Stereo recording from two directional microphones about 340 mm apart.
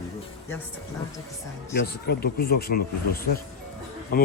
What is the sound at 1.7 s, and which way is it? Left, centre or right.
Speech, left.